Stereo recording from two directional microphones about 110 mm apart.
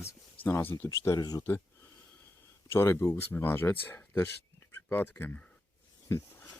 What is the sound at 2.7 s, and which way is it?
Speech, 25° left (ahead or behind).